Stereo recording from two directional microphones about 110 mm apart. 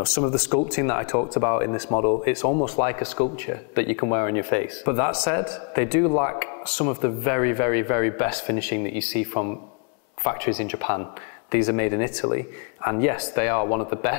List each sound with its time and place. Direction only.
0.7 s a man's voice: 20° left (ahead or behind)